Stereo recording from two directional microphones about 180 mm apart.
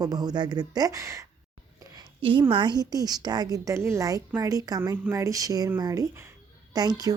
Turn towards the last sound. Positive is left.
turn(degrees=-20)  # may be behind; listen again after turning